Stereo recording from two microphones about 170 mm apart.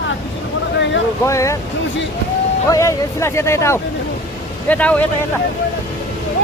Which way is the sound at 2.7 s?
15° left (ahead or behind).